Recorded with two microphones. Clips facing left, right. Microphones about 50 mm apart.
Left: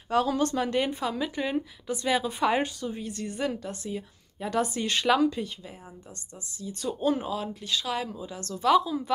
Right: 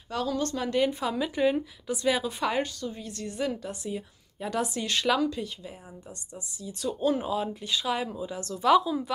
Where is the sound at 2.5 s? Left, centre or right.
Centre.